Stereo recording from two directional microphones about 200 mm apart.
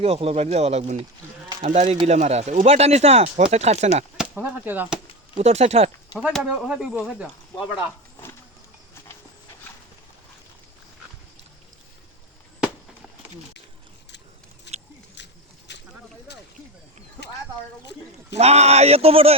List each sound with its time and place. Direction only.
0.0 s speech: 30° right (ahead or behind)
4.2 s speech: 10° right (ahead or behind)
5.4 s speech: 35° right (ahead or behind)
6.2 s speech: 5° right (ahead or behind)
14.7 s a sound: 60° left (ahead or behind)
15.1 s pig: 60° left (ahead or behind)
18.3 s speech: 30° right (ahead or behind)